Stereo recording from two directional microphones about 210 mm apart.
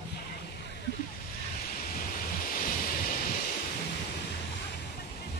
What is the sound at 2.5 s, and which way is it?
Waves, 40° left (ahead or behind).